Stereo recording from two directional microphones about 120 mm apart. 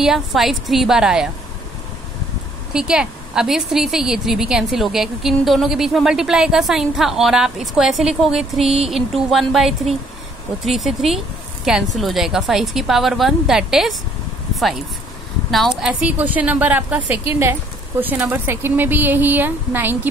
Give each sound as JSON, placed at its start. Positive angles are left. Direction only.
{"t": 0.0, "sound": "a woman's voice", "side_deg": -5}
{"t": 2.7, "sound": "a woman's voice", "side_deg": -5}
{"t": 14.5, "sound": "a sound", "side_deg": 0}
{"t": 15.8, "sound": "speech", "side_deg": -10}